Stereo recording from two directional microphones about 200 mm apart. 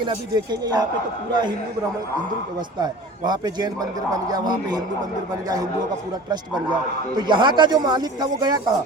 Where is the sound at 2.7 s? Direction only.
20° right (ahead or behind).